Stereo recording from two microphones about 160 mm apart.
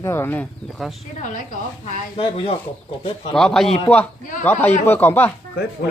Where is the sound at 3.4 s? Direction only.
5° left (ahead or behind).